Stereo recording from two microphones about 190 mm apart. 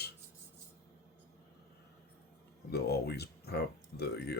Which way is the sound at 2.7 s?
55° left (ahead or behind).